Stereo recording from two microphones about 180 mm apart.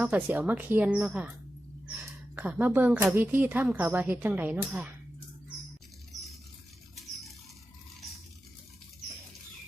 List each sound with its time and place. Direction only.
0.0 s speech: 10° right (ahead or behind)
2.3 s speech: 10° right (ahead or behind)